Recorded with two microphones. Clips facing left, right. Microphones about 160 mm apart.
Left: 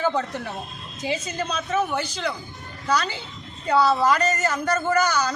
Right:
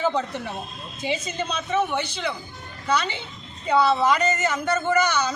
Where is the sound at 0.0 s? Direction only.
Centre (ahead or behind).